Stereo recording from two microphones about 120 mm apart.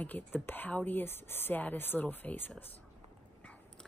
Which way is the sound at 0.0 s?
15° left (ahead or behind).